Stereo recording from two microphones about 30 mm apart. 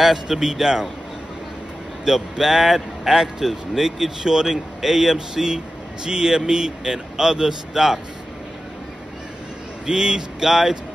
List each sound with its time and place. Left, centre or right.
0.0 s speech: centre
0.4 s speech: right
2.0 s speech: centre
9.8 s speech: right